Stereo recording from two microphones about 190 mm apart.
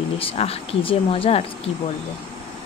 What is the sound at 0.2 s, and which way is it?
Speech, 30° left (ahead or behind).